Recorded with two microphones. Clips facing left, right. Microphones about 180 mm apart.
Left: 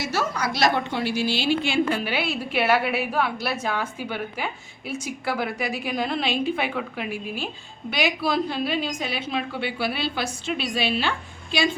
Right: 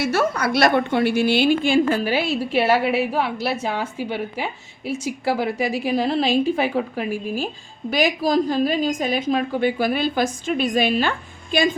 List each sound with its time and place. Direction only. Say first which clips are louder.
0.0 s a woman's voice: right 6 dB; 55° right (ahead or behind); by 4.5 s 25° right (ahead or behind)
5.2 s a woman's voice: right 5 dB; 35° right (ahead or behind)